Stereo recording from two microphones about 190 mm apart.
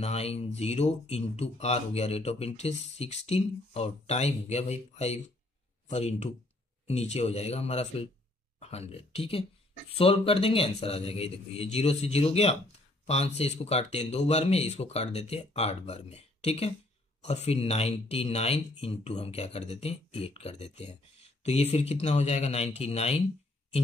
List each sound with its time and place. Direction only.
0.0 s speech: 35° left (ahead or behind)